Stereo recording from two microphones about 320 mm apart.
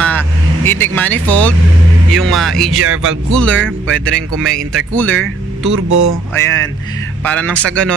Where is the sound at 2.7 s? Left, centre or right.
Right.